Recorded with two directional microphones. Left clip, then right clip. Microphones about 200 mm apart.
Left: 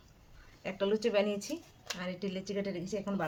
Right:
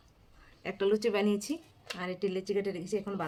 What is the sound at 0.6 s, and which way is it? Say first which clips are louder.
A woman's voice: right 3 dB; 55° right (ahead or behind).